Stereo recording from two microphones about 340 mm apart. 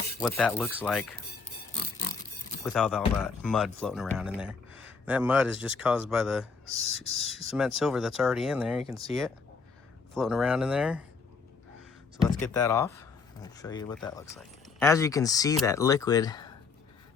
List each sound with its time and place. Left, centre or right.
0.2 s speech: centre
2.0 s a sound: left
2.6 s speech: centre
10.2 s speech: centre
12.3 s speech: centre